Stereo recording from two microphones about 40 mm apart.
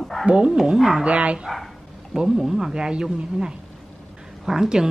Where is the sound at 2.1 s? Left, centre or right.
Centre.